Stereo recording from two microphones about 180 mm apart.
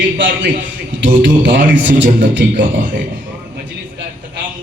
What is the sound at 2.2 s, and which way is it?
Speech, 80° right.